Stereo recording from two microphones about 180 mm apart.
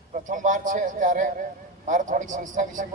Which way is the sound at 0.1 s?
45° right (ahead or behind).